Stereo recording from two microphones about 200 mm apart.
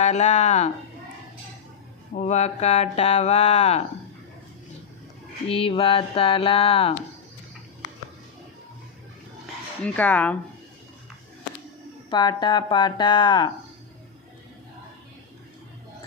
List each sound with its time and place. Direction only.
0.0 s speech: 35° left (ahead or behind)
2.1 s speech: 35° left (ahead or behind)
5.5 s speech: 25° left (ahead or behind)
9.8 s speech: 5° left (ahead or behind)
12.1 s speech: 20° left (ahead or behind)